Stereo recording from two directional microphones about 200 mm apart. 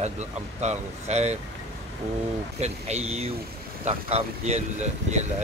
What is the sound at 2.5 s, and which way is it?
Speech, 35° right (ahead or behind).